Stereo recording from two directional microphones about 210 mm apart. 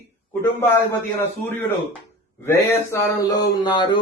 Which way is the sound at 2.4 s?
15° left (ahead or behind).